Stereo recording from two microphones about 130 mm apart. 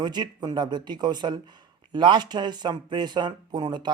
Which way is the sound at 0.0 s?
35° right (ahead or behind).